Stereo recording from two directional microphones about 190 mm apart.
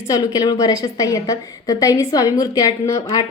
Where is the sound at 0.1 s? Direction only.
20° left (ahead or behind).